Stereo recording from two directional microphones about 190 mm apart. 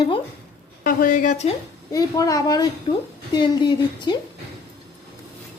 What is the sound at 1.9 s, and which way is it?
Speech, 20° left (ahead or behind).